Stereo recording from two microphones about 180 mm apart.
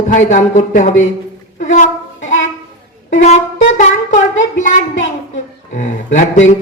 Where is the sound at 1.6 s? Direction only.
45° left (ahead or behind).